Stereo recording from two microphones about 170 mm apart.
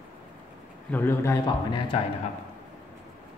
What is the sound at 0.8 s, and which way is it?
Speech, 10° left (ahead or behind).